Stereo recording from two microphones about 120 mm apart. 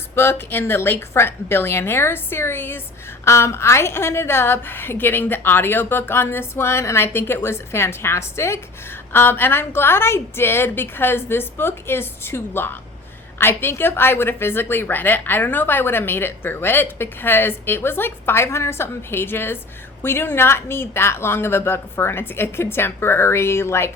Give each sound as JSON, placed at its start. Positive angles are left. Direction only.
{"t": 0.2, "sound": "a woman's voice", "side_deg": 20}